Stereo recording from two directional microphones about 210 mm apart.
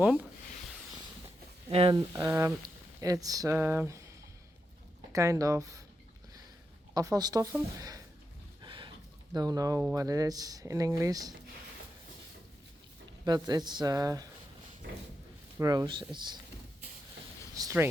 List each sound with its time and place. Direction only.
0.0 s speech: 5° right (ahead or behind)
1.7 s speech: 25° right (ahead or behind)
5.1 s speech: 15° right (ahead or behind)
6.9 s speech: 15° right (ahead or behind)
8.6 s a sound: 20° right (ahead or behind)
9.3 s speech: 20° right (ahead or behind)
13.2 s speech: 20° right (ahead or behind)
15.5 s speech: 15° right (ahead or behind)
17.5 s a sound: 15° right (ahead or behind)